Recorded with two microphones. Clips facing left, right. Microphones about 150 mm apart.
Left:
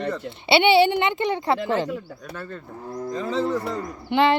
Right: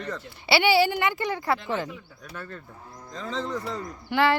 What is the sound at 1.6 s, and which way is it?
Speech, 75° left (ahead or behind).